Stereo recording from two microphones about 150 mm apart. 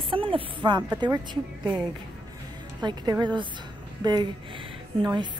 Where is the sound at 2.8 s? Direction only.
30° right (ahead or behind).